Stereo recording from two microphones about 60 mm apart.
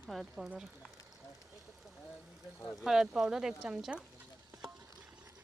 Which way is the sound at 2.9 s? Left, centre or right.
Centre.